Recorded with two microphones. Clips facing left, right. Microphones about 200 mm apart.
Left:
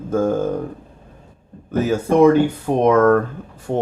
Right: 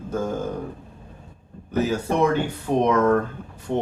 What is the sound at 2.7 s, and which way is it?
Speech, 55° left (ahead or behind).